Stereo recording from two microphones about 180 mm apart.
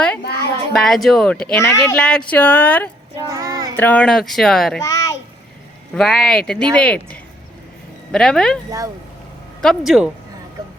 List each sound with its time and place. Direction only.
0.2 s a sound: 65° left (ahead or behind)
0.7 s speech: centre (ahead or behind)
1.5 s speech: 15° left (ahead or behind)
2.0 s speech: 5° left (ahead or behind)
3.2 s child singing: 20° right (ahead or behind)
3.8 s speech: 10° left (ahead or behind)
4.8 s speech: 20° left (ahead or behind)
5.9 s speech: 5° left (ahead or behind)
9.6 s speech: centre (ahead or behind)